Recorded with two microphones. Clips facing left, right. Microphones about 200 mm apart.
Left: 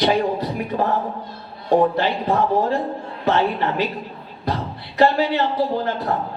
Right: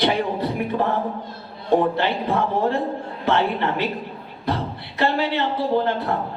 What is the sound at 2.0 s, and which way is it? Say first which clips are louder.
Speech: left 2 dB; 60° right (ahead or behind).